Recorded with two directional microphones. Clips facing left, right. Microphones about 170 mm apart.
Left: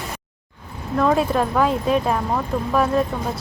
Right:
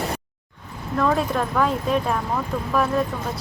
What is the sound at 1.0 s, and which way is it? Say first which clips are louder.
Speech: left 3 dB; 20° left (ahead or behind).